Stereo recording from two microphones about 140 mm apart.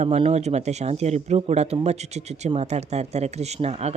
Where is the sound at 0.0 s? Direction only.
50° right (ahead or behind).